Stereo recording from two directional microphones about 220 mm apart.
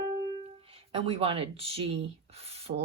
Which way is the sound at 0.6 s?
25° right (ahead or behind).